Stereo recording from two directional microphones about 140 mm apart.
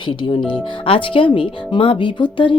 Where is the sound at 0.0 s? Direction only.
35° left (ahead or behind).